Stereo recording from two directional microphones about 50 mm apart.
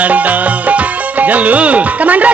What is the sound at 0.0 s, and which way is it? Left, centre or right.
Music, right.